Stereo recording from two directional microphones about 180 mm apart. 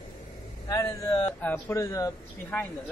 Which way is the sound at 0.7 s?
20° left (ahead or behind).